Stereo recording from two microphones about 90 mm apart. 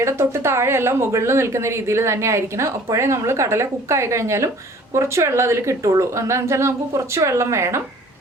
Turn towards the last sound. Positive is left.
turn(degrees=-30)  # may be behind; listen again after turning